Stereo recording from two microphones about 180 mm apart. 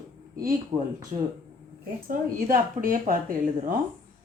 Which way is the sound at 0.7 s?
25° right (ahead or behind).